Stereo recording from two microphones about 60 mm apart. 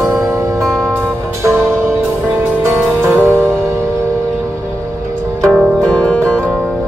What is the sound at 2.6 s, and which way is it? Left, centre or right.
Music, right.